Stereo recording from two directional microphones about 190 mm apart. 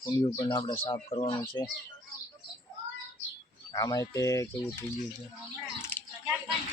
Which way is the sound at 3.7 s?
20° left (ahead or behind).